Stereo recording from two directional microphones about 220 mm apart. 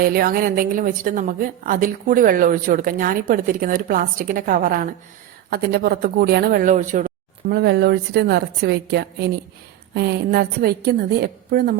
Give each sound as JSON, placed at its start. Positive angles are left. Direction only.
{"t": 0.0, "sound": "a woman's voice", "side_deg": -40}
{"t": 7.5, "sound": "a woman's voice", "side_deg": -45}